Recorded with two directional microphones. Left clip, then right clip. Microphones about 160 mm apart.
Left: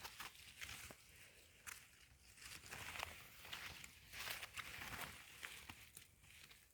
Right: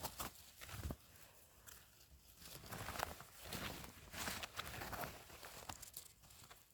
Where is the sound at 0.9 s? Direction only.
30° right (ahead or behind).